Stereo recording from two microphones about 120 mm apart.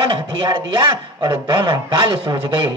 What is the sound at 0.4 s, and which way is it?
Speech, 40° right (ahead or behind).